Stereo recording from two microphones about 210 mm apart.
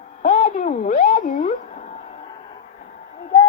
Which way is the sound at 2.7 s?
40° left (ahead or behind).